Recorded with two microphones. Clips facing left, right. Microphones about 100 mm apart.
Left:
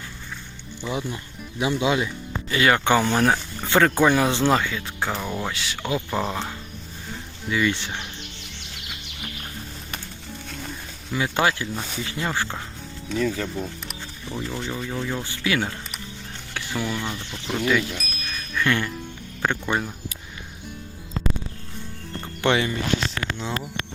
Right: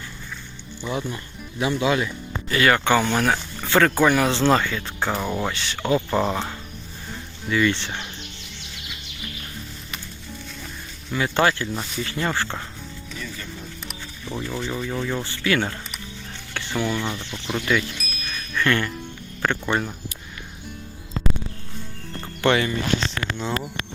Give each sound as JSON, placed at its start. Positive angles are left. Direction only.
{"t": 0.9, "sound": "speech", "side_deg": 15}
{"t": 7.4, "sound": "speech", "side_deg": 10}
{"t": 11.1, "sound": "speech", "side_deg": 10}
{"t": 13.1, "sound": "speech", "side_deg": 75}
{"t": 14.7, "sound": "speech", "side_deg": 5}
{"t": 22.4, "sound": "speech", "side_deg": 15}